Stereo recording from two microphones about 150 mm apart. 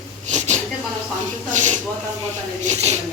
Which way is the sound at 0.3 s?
55° right (ahead or behind).